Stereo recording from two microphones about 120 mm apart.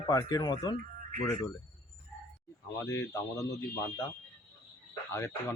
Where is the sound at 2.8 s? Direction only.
25° left (ahead or behind).